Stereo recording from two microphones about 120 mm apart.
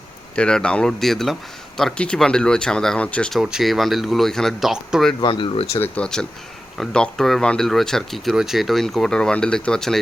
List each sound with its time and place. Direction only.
0.3 s speech: 10° left (ahead or behind)
3.4 s speech: 5° right (ahead or behind)
5.2 s speech: 45° left (ahead or behind)
5.7 s speech: 15° left (ahead or behind)